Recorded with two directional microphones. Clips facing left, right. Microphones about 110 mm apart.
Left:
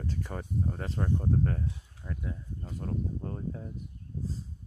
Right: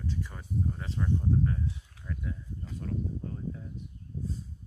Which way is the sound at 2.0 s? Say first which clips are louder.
Even; 90° right.